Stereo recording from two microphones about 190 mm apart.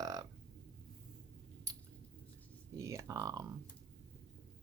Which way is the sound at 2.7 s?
15° right (ahead or behind).